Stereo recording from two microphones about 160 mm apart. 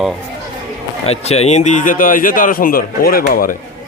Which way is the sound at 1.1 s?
40° left (ahead or behind).